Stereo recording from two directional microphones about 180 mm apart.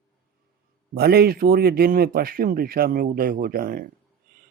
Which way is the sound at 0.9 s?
60° right (ahead or behind).